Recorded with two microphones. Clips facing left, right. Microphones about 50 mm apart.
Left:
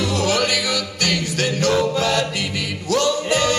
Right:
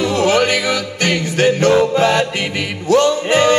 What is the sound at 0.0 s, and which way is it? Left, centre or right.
Music, right.